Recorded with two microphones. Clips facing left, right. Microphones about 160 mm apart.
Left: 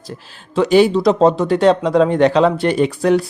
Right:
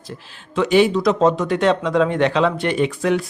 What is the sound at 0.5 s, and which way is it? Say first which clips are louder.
Speech: left 3 dB; 35° left (ahead or behind).